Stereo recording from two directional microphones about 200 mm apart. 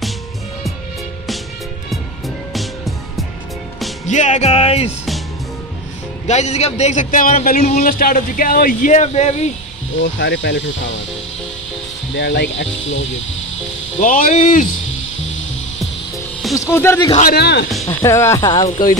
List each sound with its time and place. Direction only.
1.9 s music: centre (ahead or behind)
4.1 s a man's voice: 35° left (ahead or behind)
6.2 s a man's voice: 35° left (ahead or behind)
10.1 s speech: 60° left (ahead or behind)
12.2 s speech: 60° left (ahead or behind)
14.0 s a man's voice: 40° left (ahead or behind)
16.7 s speech: 10° left (ahead or behind)
17.2 s speech: 50° left (ahead or behind)
17.8 s speech: 15° left (ahead or behind)
18.7 s a man's voice: 40° left (ahead or behind)